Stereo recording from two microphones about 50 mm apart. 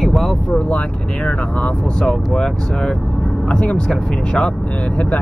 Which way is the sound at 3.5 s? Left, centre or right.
Left.